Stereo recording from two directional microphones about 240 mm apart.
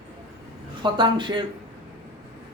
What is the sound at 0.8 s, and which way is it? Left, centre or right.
Speech, centre.